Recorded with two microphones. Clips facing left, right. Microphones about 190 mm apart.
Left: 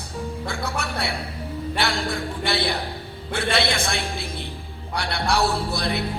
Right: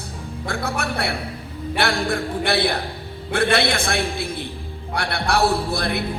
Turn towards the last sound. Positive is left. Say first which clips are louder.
# right 3 dB
turn(degrees=-55)  # may be behind; listen again after turning